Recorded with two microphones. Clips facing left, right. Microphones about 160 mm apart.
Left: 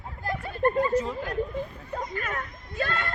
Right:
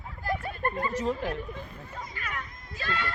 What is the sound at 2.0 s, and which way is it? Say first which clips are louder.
Speech: left 6 dB; 45° left (ahead or behind).